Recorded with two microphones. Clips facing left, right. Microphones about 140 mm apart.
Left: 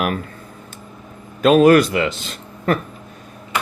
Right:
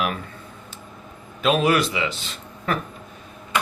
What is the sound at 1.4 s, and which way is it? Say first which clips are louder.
A man's voice: left 8 dB; 45° left (ahead or behind).